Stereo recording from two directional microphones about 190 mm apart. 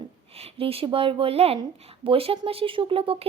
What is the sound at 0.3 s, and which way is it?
Speech, 30° right (ahead or behind).